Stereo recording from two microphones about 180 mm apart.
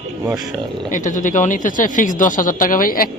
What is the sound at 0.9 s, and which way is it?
Speech, 45° left (ahead or behind).